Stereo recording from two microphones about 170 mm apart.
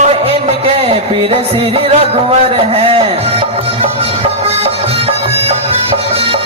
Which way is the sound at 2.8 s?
35° right (ahead or behind).